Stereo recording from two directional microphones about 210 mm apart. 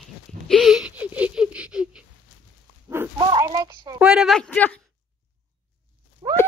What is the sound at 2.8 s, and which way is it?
Dog, 10° right (ahead or behind).